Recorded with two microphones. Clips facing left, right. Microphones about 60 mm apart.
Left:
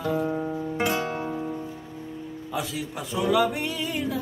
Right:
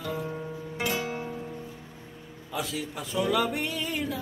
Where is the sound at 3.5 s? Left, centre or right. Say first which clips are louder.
Left 2 dB; centre.